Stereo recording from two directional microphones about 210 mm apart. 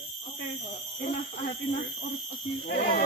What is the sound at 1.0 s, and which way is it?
Speech, 40° left (ahead or behind).